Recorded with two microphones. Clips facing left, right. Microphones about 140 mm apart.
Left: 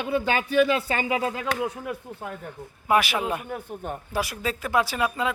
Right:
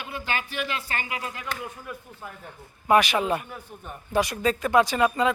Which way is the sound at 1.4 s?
90° left.